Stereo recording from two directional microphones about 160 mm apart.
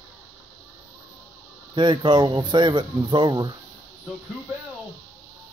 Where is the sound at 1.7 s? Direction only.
30° right (ahead or behind).